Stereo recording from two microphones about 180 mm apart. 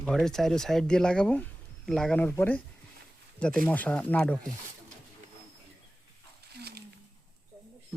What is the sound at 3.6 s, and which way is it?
Speech, 10° left (ahead or behind).